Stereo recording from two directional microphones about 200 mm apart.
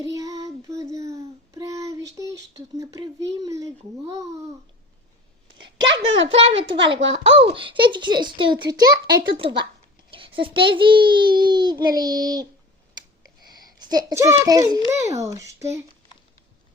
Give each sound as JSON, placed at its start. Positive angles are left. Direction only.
{"t": 0.0, "sound": "child singing", "side_deg": -15}
{"t": 6.1, "sound": "a child's voice", "side_deg": -70}
{"t": 6.3, "sound": "a child's voice", "side_deg": -30}
{"t": 13.6, "sound": "a child's voice", "side_deg": -20}